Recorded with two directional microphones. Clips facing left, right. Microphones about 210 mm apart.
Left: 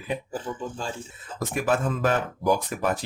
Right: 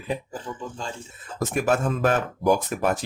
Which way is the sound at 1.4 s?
45° right (ahead or behind).